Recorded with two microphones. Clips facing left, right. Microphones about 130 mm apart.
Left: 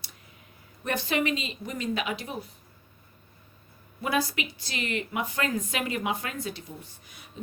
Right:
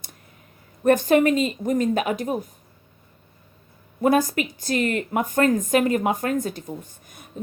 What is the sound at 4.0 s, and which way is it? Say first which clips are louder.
Speech: right 9 dB; 45° right (ahead or behind).